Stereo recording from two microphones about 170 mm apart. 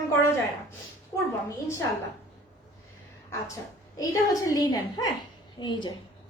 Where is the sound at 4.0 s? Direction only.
20° left (ahead or behind).